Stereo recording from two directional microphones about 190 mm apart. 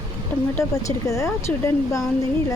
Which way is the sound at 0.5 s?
15° left (ahead or behind).